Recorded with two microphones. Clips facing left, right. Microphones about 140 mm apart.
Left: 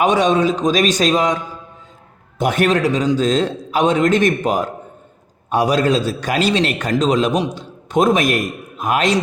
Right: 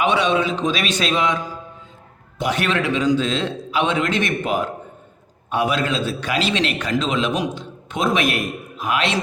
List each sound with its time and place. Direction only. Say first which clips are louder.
0.0 s a man's voice: left 4 dB; 40° left (ahead or behind)
2.4 s a man's voice: left 5 dB; 50° left (ahead or behind)